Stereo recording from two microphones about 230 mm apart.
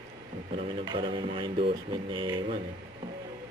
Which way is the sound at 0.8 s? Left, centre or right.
Right.